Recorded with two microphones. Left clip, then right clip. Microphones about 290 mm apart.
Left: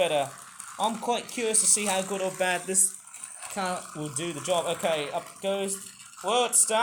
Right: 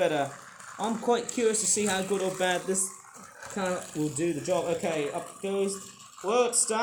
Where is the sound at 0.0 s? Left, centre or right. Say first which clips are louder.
Left 1 dB; centre.